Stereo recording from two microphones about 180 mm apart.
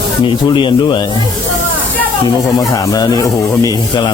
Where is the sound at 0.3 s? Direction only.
25° left (ahead or behind).